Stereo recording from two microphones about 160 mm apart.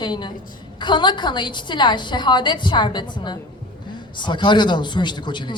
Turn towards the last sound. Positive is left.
turn(degrees=30)  # may be behind; listen again after turning